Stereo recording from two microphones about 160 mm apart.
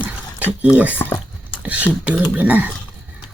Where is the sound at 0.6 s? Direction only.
10° right (ahead or behind).